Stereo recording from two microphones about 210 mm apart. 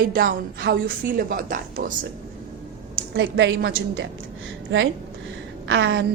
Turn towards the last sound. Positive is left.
turn(degrees=-60)  # may be behind; listen again after turning